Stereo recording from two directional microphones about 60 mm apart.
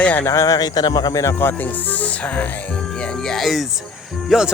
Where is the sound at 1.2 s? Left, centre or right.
Left.